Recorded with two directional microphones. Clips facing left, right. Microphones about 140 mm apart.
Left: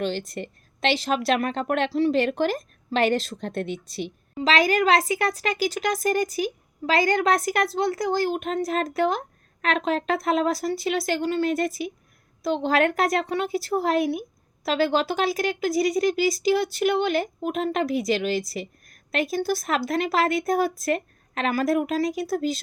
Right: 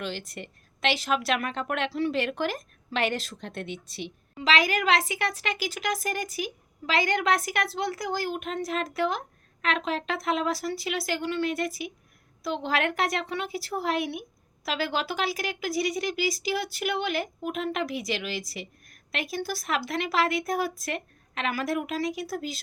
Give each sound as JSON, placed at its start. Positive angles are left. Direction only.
{"t": 0.0, "sound": "speech", "side_deg": 35}